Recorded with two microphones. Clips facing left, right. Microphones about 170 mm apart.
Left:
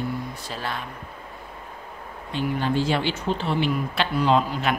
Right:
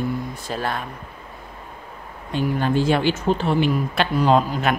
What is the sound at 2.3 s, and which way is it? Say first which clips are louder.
Speech: right 3 dB; 45° right (ahead or behind).